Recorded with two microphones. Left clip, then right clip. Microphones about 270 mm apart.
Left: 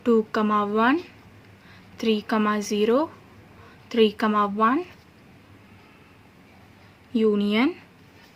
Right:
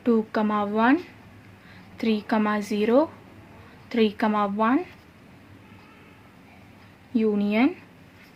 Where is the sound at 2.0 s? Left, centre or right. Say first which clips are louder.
Left 2 dB; left.